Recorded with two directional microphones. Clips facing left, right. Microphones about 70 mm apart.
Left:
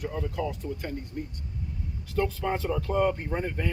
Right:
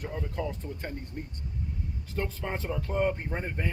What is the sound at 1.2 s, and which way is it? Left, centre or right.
Speech, right.